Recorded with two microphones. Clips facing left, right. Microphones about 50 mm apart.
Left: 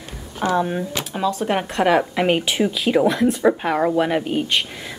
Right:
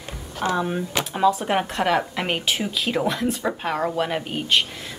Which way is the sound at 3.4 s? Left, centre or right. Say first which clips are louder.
Left 8 dB; centre.